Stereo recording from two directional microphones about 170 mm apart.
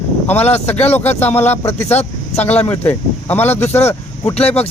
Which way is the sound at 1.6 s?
40° left (ahead or behind).